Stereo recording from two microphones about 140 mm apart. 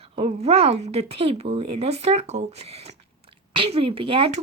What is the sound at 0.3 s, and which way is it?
Speech, 45° right (ahead or behind).